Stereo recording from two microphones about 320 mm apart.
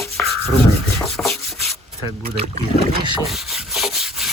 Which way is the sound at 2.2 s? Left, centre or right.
Centre.